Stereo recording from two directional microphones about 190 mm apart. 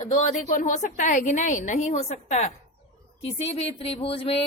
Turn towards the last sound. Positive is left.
turn(degrees=30)  # may be behind; listen again after turning